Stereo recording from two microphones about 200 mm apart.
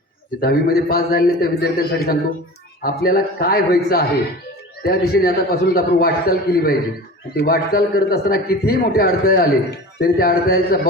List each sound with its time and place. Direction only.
0.4 s a man's voice: 50° left (ahead or behind)